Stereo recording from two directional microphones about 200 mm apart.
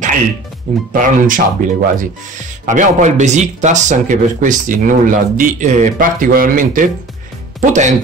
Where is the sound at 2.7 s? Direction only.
40° right (ahead or behind).